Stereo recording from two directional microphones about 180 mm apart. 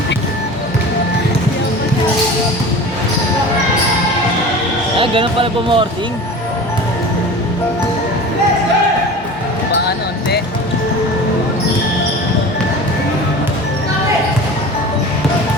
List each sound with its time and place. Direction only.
4.9 s speech: 30° right (ahead or behind)